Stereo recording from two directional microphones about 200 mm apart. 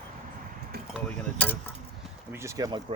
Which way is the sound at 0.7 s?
50° right (ahead or behind).